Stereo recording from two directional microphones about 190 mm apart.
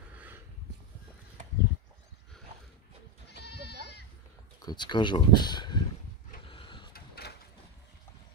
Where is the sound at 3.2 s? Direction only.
60° left (ahead or behind).